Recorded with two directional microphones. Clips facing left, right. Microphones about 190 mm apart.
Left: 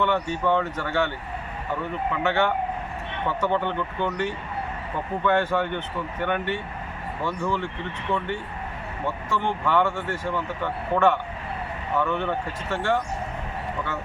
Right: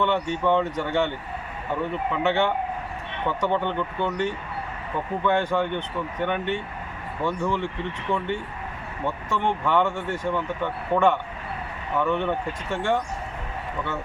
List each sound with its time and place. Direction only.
0.0 s speech: 20° right (ahead or behind)
2.2 s speech: 15° right (ahead or behind)
9.3 s speech: 15° right (ahead or behind)